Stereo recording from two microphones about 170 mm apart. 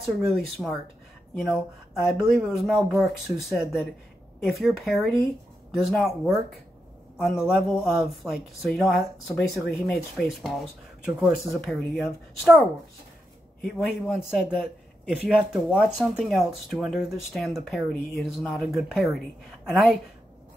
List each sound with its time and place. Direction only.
0.0 s speech: centre (ahead or behind)
2.0 s speech: centre (ahead or behind)